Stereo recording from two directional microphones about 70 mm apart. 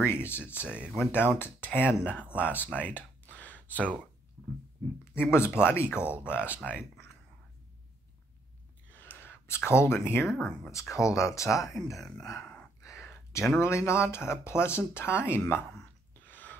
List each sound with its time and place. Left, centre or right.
0.0 s speech: left
0.7 s speech: centre
1.1 s speech: left
5.2 s speech: left
8.9 s a sound: left
10.2 s speech: centre
10.7 s speech: left
11.7 s speech: centre
12.8 s a sound: left
13.6 s speech: left
16.3 s a sound: left